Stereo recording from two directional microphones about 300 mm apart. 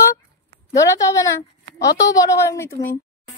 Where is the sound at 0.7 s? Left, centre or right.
Centre.